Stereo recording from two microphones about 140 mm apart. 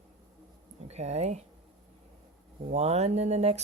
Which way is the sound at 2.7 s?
50° right (ahead or behind).